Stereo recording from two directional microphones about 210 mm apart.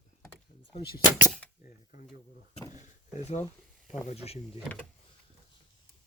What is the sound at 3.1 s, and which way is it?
Speech, 35° left (ahead or behind).